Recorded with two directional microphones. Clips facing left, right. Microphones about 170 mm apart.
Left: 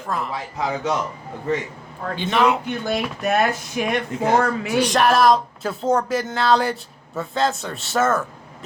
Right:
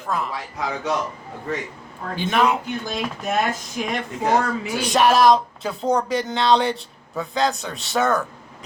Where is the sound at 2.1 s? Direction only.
10° right (ahead or behind).